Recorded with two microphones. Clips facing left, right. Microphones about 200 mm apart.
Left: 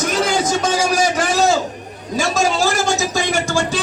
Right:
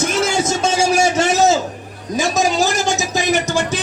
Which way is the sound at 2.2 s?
20° right (ahead or behind).